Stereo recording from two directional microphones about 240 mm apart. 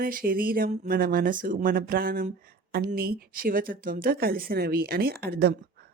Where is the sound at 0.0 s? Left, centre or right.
Right.